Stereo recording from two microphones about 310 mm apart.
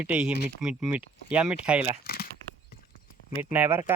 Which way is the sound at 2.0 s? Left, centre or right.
Left.